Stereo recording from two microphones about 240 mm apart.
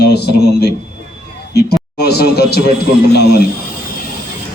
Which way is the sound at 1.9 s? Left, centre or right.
Left.